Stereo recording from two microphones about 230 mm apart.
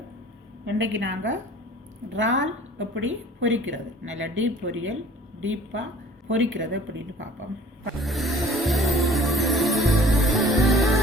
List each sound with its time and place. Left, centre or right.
0.6 s a woman's voice: right
7.9 s music: centre